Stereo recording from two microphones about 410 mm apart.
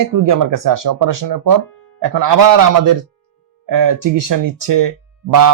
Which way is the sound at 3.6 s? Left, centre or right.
Right.